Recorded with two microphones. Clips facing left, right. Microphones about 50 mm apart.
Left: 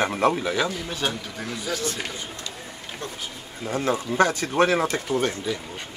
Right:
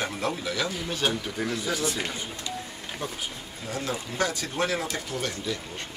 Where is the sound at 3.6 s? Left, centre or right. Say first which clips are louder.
Left 7 dB; left.